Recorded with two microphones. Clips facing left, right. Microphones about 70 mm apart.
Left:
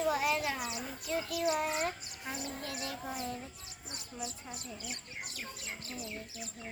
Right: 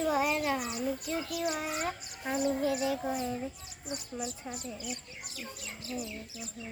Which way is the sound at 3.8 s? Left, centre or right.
Centre.